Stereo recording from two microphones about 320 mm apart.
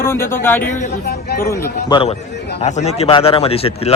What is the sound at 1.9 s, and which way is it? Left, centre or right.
Speech, centre.